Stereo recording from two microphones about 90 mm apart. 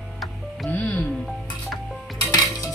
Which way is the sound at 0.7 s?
20° left (ahead or behind).